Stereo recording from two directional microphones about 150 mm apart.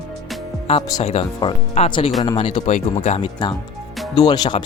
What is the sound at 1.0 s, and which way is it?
Speech, 45° left (ahead or behind).